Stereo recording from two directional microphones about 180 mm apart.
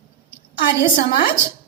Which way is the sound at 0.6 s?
60° left (ahead or behind).